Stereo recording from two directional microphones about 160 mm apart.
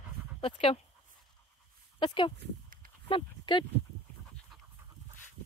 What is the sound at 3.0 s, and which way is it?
Speech, 30° left (ahead or behind).